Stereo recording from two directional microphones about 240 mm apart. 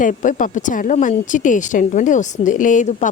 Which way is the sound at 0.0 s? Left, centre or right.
Left.